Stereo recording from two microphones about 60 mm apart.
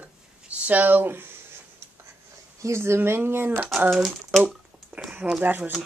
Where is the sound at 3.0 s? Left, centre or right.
Right.